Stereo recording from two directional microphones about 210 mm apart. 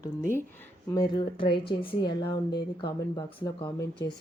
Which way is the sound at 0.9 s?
20° left (ahead or behind).